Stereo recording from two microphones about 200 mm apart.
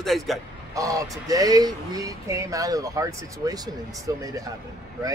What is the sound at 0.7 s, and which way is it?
Speech, 15° right (ahead or behind).